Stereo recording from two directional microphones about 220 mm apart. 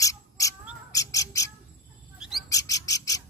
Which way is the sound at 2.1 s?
5° right (ahead or behind).